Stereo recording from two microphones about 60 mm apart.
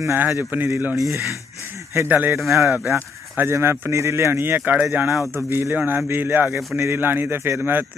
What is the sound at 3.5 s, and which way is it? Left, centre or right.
Speech, right.